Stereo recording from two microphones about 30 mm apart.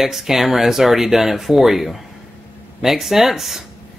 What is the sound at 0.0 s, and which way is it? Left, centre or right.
Speech, centre.